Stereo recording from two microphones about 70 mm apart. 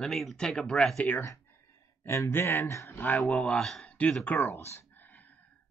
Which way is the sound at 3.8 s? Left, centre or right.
Centre.